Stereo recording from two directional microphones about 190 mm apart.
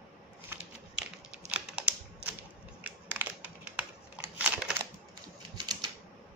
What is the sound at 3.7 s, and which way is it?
Crumpling, 5° right (ahead or behind).